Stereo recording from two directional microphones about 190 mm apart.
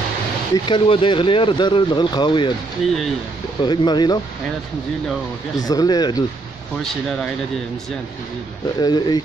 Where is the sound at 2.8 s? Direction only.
Centre (ahead or behind).